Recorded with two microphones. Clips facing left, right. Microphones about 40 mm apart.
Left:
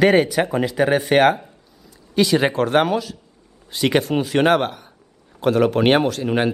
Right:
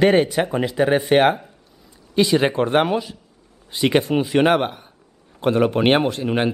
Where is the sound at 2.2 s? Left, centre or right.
Centre.